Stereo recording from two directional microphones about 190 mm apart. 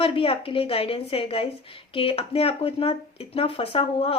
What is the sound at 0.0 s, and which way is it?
Speech, 30° left (ahead or behind).